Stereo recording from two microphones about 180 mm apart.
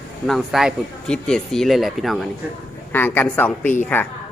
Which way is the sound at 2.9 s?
10° left (ahead or behind).